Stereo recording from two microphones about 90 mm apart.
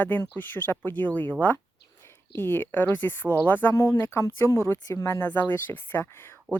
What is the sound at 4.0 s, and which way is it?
Speech, 25° left (ahead or behind).